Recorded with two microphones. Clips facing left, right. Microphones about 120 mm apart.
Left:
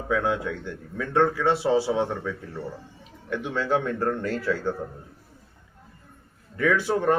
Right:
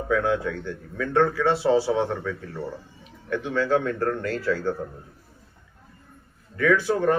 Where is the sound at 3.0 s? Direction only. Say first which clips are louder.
Right 2 dB; 15° left (ahead or behind).